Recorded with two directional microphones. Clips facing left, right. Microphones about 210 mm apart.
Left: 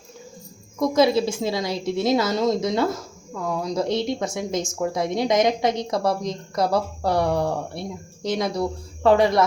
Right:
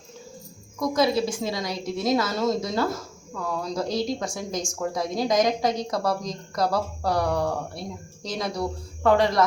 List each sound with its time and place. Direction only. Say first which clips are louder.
0.8 s speech: left 4 dB; 25° left (ahead or behind)